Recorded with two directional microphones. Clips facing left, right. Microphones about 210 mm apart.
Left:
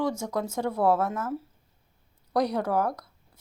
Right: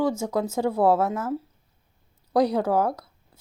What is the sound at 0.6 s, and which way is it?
Speech, 25° right (ahead or behind).